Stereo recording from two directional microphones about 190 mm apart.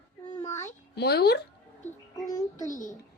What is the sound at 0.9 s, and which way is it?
Speech, 60° left (ahead or behind).